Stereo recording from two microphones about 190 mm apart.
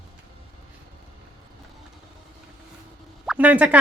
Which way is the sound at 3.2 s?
5° right (ahead or behind).